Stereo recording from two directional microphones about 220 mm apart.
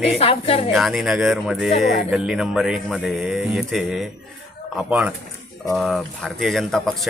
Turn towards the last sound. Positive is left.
turn(degrees=0)  # may be behind; listen again after turning